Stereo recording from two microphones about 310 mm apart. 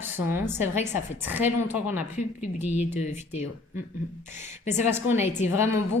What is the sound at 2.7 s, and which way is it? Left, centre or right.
Speech, left.